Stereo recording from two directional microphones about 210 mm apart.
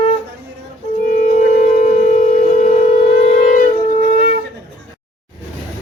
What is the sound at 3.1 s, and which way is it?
Shofar, 35° left (ahead or behind).